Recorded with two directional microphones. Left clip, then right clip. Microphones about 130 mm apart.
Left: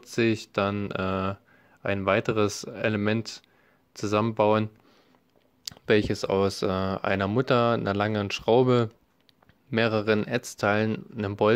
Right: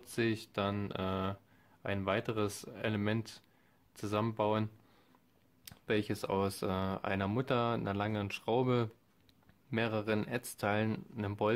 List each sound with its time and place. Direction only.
0.0 s speech: 35° left (ahead or behind)
5.7 s speech: 30° left (ahead or behind)